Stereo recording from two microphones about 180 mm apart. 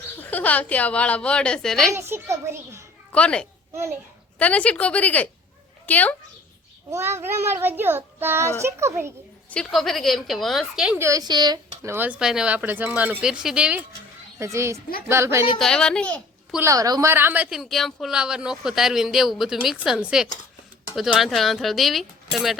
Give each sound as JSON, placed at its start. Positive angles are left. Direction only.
{"t": 0.0, "sound": "a woman's voice", "side_deg": 10}
{"t": 2.0, "sound": "a child's voice", "side_deg": -15}
{"t": 3.1, "sound": "a woman's voice", "side_deg": 5}
{"t": 3.7, "sound": "a child's voice", "side_deg": -15}
{"t": 4.4, "sound": "a woman's voice", "side_deg": 10}
{"t": 6.9, "sound": "a child's voice", "side_deg": -15}
{"t": 9.5, "sound": "a woman's voice", "side_deg": 5}
{"t": 11.0, "sound": "a woman's voice", "side_deg": -20}
{"t": 15.5, "sound": "a child's voice", "side_deg": 5}
{"t": 16.6, "sound": "a woman's voice", "side_deg": -15}